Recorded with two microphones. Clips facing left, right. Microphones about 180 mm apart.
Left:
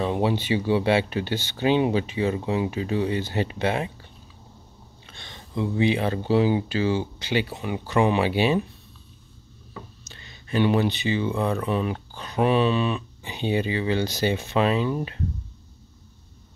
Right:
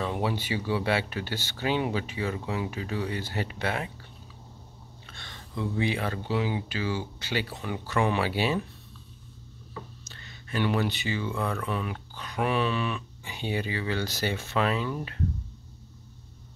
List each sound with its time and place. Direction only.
0.0 s speech: 25° left (ahead or behind)
5.0 s speech: 20° left (ahead or behind)
10.0 s speech: 15° left (ahead or behind)